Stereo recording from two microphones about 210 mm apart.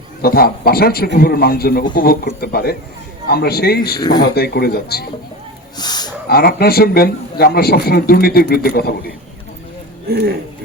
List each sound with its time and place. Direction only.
0.2 s a man's voice: 45° left (ahead or behind)
4.0 s speech: 20° left (ahead or behind)
4.4 s a man's voice: 50° left (ahead or behind)
5.7 s a sound: 20° left (ahead or behind)
6.2 s a man's voice: 50° left (ahead or behind)
10.1 s speech: 45° right (ahead or behind)